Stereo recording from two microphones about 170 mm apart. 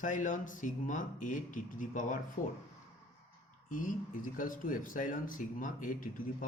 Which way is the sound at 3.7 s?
50° left (ahead or behind).